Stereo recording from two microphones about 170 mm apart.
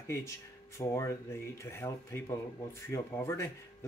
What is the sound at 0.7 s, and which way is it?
Speech, 15° left (ahead or behind).